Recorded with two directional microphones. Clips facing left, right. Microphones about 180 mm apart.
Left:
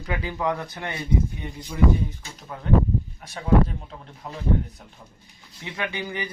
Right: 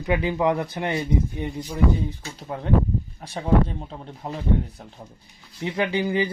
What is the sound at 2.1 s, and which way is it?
Speech, 30° right (ahead or behind).